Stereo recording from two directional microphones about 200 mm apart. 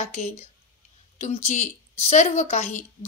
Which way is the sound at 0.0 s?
35° left (ahead or behind).